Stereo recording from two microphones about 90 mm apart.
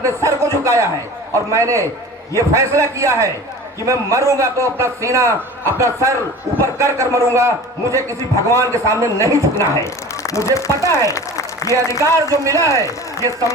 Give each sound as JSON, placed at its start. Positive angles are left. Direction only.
{"t": 0.0, "sound": "a sound", "side_deg": -35}
{"t": 1.5, "sound": "a man's voice", "side_deg": -35}
{"t": 9.6, "sound": "speech", "side_deg": 35}
{"t": 12.0, "sound": "a man's voice", "side_deg": -35}